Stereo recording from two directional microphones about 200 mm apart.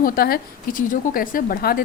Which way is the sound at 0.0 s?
45° left (ahead or behind).